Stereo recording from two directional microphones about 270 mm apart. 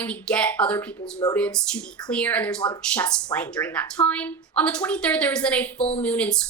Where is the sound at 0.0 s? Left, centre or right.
Centre.